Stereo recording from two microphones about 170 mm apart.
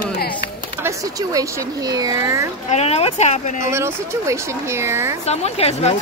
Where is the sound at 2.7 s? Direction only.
40° left (ahead or behind).